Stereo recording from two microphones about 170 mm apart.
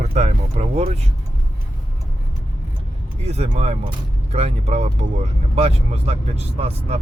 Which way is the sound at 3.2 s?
40° right (ahead or behind).